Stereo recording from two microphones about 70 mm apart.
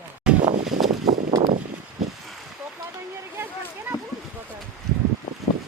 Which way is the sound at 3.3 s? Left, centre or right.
Right.